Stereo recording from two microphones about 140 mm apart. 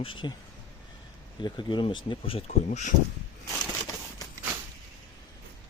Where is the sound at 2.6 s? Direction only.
60° left (ahead or behind).